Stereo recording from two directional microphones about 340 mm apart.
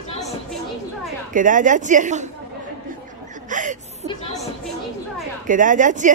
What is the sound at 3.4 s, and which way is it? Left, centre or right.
Chuckle, right.